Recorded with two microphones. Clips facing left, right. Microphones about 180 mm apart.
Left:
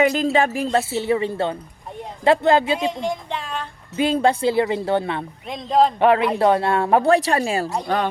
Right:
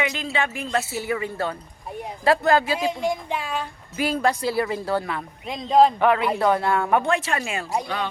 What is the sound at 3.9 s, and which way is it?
Speech, 25° left (ahead or behind).